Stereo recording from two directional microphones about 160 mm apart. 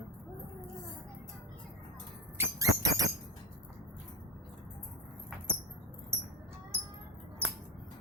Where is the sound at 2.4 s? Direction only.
20° right (ahead or behind).